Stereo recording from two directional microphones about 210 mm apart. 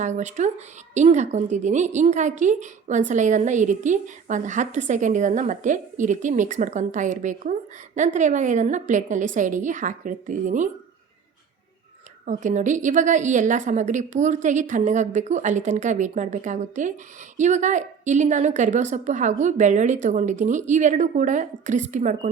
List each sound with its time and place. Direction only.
0.0 s a woman's voice: 35° right (ahead or behind)
12.2 s a woman's voice: 35° right (ahead or behind)